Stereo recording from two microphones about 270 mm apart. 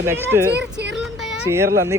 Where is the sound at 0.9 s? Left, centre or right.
Centre.